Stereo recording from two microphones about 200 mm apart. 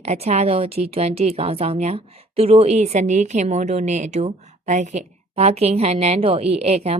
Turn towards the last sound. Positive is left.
turn(degrees=-30)  # may be behind; listen again after turning